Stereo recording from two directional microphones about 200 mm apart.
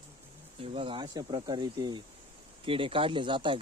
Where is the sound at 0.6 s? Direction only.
25° right (ahead or behind).